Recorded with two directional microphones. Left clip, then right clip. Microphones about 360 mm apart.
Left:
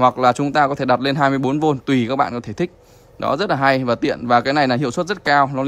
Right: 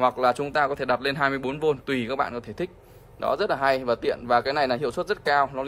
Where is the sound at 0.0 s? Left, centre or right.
Centre.